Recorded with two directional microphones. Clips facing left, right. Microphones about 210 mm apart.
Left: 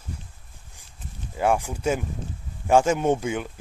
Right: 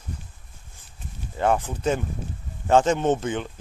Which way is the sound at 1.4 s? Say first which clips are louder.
Even; 10° left (ahead or behind).